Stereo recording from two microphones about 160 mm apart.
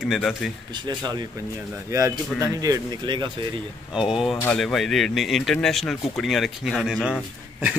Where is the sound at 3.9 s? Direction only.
5° right (ahead or behind).